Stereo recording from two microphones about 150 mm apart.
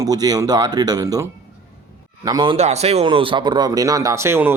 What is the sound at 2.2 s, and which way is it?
Speech, 30° right (ahead or behind).